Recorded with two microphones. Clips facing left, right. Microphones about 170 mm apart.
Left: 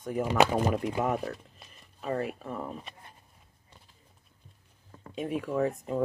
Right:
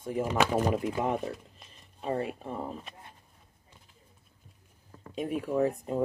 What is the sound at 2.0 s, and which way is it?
Speech, 30° right (ahead or behind).